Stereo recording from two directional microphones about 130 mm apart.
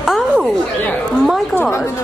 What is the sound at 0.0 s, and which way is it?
Chatter, 5° right (ahead or behind).